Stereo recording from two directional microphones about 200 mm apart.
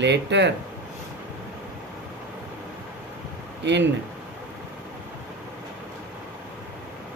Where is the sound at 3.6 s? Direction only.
60° right (ahead or behind).